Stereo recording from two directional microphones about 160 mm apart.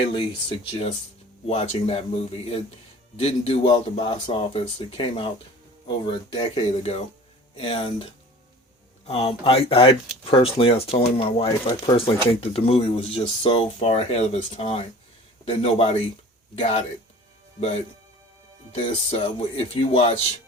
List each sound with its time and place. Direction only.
0.0 s speech: 30° left (ahead or behind)
9.0 s speech: 40° left (ahead or behind)